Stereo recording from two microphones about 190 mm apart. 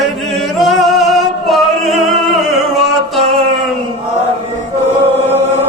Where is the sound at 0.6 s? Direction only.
Centre (ahead or behind).